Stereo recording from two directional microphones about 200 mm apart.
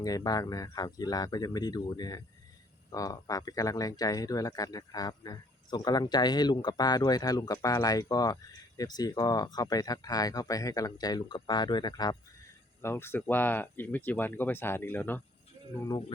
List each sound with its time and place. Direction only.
0.0 s speech: 20° left (ahead or behind)
15.9 s speech: 25° left (ahead or behind)